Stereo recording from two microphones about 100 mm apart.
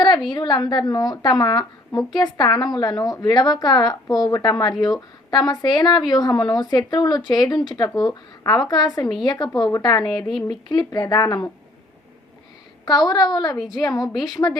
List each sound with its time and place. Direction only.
0.3 s a woman's voice: 50° left (ahead or behind)
12.8 s a woman's voice: 40° left (ahead or behind)